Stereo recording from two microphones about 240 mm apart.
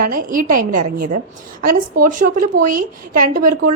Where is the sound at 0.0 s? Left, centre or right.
Right.